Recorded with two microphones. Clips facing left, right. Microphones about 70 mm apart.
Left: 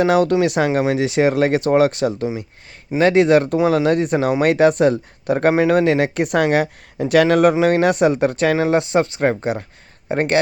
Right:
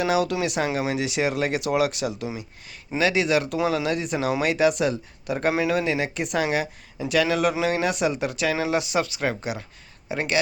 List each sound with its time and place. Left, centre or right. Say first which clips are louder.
0.0 s speech: left 8 dB; left